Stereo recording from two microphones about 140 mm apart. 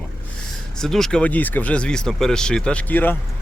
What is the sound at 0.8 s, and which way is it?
Speech, 5° left (ahead or behind).